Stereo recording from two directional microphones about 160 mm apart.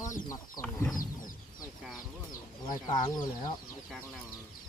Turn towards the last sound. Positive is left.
turn(degrees=25)  # may be behind; listen again after turning